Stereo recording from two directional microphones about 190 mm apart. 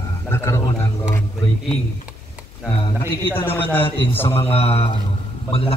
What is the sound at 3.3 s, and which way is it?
Speech, 10° left (ahead or behind).